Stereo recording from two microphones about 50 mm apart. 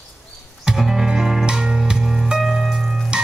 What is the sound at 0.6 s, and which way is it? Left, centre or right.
Music, centre.